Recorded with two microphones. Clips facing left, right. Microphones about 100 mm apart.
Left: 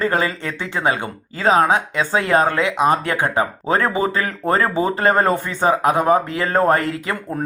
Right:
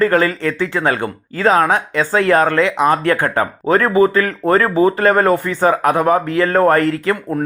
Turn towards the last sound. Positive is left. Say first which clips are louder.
# right 6 dB
turn(degrees=20)  # may be behind; listen again after turning